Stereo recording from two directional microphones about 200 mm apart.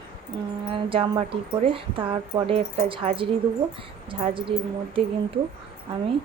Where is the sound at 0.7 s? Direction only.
25° right (ahead or behind).